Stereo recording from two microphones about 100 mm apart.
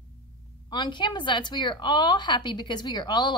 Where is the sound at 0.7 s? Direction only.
50° left (ahead or behind).